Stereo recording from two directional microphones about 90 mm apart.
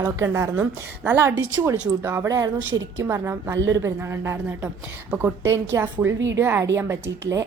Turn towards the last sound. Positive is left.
turn(degrees=-35)  # may be behind; listen again after turning